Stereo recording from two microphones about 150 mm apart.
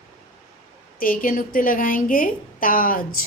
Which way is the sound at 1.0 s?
70° left (ahead or behind).